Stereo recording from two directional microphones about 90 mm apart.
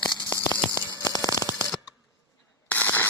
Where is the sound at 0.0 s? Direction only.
55° left (ahead or behind).